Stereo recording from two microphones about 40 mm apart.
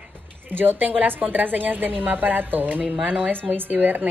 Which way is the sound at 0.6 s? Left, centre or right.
Right.